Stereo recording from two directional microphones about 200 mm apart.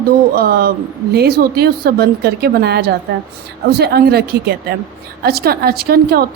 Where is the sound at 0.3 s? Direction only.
50° right (ahead or behind).